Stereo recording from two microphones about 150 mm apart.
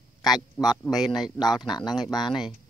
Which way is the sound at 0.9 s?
Centre (ahead or behind).